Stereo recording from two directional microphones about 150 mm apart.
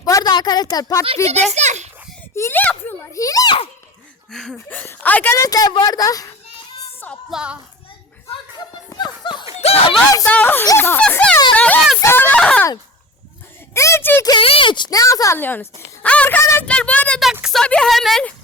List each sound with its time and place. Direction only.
0.0 s a woman's voice: 25° left (ahead or behind)
1.0 s a child's voice: 40° right (ahead or behind)
2.3 s a child's voice: 15° left (ahead or behind)
4.3 s speech: 5° left (ahead or behind)
4.5 s speech: 15° left (ahead or behind)
7.3 s speech: 5° right (ahead or behind)
8.3 s a sound: 30° left (ahead or behind)
9.6 s a sound: 45° left (ahead or behind)
10.2 s a child's voice: 10° left (ahead or behind)
11.5 s a sound: 10° left (ahead or behind)
13.7 s a sound: 20° left (ahead or behind)
14.3 s a child's voice: 35° left (ahead or behind); by 18.3 s 5° left (ahead or behind)